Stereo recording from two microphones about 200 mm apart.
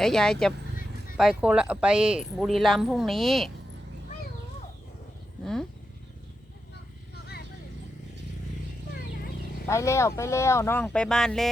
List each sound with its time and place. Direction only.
0.0 s speech: 5° left (ahead or behind)
9.1 s a sound: 45° left (ahead or behind)
9.6 s speech: 15° left (ahead or behind)